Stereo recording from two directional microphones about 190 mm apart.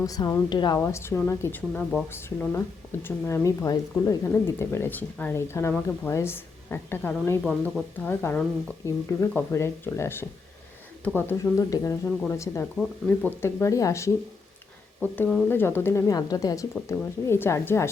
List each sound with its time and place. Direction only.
0.0 s a woman's voice: 20° left (ahead or behind)